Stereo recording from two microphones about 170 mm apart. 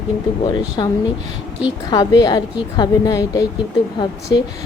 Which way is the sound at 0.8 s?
25° left (ahead or behind).